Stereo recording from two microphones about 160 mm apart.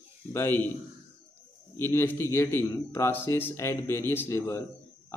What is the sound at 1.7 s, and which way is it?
A man's voice, 15° left (ahead or behind).